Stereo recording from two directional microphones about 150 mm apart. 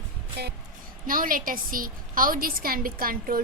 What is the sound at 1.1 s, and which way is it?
A woman's voice, 70° right (ahead or behind).